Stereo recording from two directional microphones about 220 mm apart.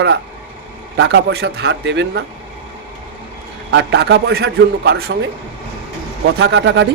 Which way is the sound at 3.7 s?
50° right (ahead or behind).